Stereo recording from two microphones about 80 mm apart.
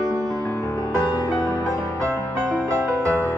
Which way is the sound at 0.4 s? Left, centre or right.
Left.